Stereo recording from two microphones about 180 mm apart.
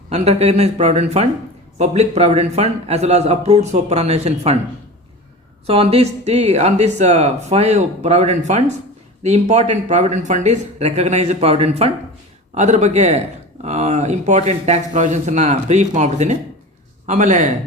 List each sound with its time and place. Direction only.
0.1 s speech: 35° right (ahead or behind)
5.6 s speech: 35° right (ahead or behind)